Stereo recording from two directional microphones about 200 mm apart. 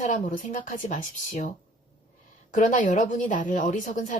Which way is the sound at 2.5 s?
40° left (ahead or behind).